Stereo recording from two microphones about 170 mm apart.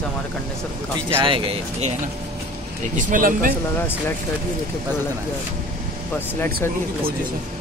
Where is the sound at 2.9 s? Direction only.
55° right (ahead or behind).